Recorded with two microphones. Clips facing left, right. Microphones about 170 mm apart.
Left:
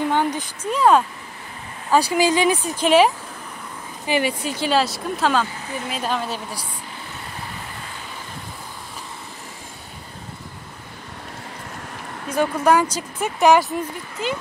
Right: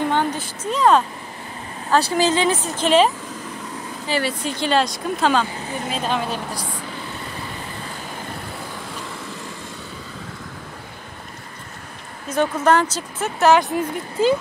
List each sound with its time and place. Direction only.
0.1 s speech: 10° left (ahead or behind)
4.1 s speech: 15° left (ahead or behind)
12.3 s speech: 10° left (ahead or behind)
14.2 s speech: 30° right (ahead or behind)